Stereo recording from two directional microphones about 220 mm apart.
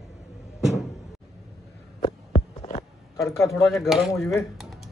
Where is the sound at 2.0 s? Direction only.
30° left (ahead or behind).